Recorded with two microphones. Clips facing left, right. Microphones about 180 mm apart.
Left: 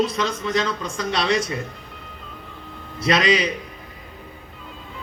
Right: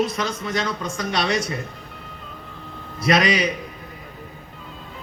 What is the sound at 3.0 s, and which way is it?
Speech, 30° left (ahead or behind).